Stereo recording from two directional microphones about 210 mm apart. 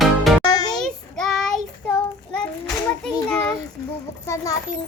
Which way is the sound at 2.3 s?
5° left (ahead or behind).